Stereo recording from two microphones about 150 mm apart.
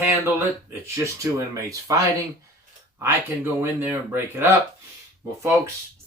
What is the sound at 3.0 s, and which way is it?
Speech, 15° right (ahead or behind).